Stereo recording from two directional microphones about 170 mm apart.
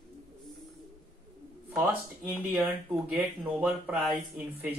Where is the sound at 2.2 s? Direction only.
5° right (ahead or behind).